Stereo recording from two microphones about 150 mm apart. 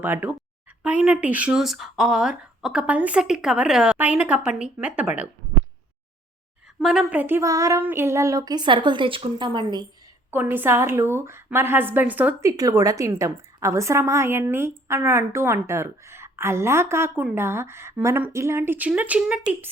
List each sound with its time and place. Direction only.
0.0 s a woman's voice: 15° right (ahead or behind)
6.7 s a sound: 5° right (ahead or behind); by 9.8 s 30° right (ahead or behind)
10.3 s a woman's voice: 15° right (ahead or behind)
12.5 s a woman's voice: 25° right (ahead or behind)